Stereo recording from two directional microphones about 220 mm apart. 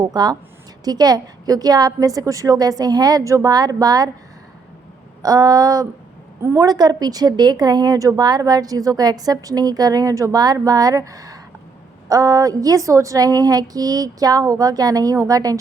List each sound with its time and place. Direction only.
0.0 s a woman's voice: 15° right (ahead or behind)
5.2 s a woman's voice: 15° right (ahead or behind)